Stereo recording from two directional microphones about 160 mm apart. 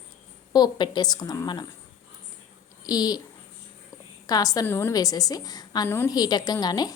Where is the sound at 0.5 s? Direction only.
25° left (ahead or behind).